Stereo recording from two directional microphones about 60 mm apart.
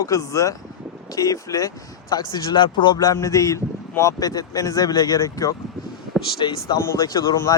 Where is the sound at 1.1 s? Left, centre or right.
Left.